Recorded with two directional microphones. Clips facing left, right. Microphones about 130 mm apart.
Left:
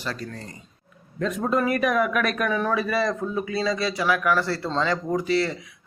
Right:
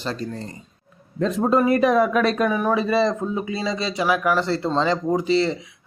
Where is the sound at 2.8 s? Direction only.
25° right (ahead or behind).